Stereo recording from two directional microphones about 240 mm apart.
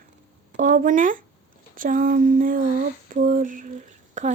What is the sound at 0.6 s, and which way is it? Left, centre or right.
Speech, right.